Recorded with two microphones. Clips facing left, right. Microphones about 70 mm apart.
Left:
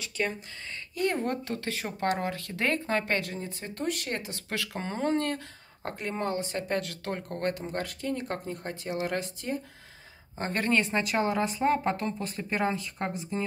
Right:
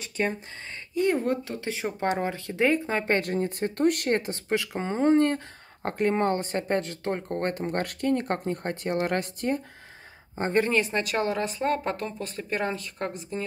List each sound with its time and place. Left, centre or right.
0.2 s speech: right
0.9 s speech: centre
1.6 s speech: centre
3.2 s speech: right
4.5 s speech: right
5.8 s speech: right
6.7 s speech: right
7.6 s speech: right
10.5 s speech: centre
10.8 s speech: centre